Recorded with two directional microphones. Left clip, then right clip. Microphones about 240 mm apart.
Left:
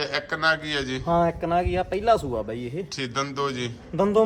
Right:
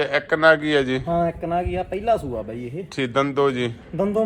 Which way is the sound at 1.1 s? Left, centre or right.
Left.